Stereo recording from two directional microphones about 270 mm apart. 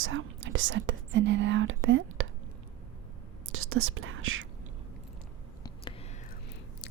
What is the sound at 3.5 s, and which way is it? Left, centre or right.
Whispering, right.